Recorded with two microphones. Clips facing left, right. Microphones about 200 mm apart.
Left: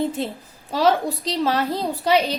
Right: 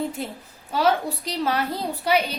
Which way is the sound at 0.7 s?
35° left (ahead or behind).